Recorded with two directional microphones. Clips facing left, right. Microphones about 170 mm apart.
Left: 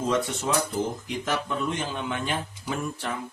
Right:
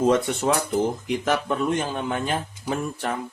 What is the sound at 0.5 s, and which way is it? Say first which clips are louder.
Speech: right 6 dB; 60° right (ahead or behind).